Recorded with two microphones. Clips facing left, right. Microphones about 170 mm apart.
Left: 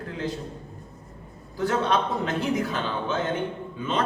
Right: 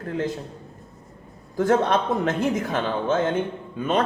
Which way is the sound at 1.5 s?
50° right (ahead or behind).